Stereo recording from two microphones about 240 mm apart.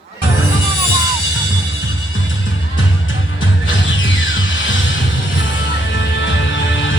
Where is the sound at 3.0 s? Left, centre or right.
Left.